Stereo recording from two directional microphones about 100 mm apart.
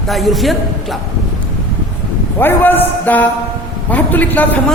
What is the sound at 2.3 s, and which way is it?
A man's voice, 20° left (ahead or behind).